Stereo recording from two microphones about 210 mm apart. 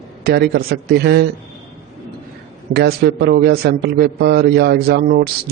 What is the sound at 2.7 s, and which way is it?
A man's voice, 50° right (ahead or behind).